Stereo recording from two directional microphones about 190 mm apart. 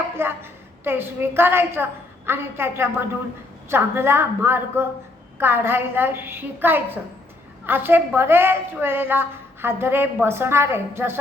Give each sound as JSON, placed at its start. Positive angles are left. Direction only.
{"t": 0.2, "sound": "a woman's voice", "side_deg": -10}